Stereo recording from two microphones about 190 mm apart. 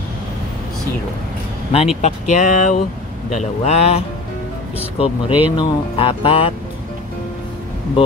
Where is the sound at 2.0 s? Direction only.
40° left (ahead or behind).